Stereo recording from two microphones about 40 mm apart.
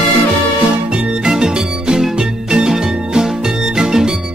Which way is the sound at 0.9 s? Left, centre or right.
Centre.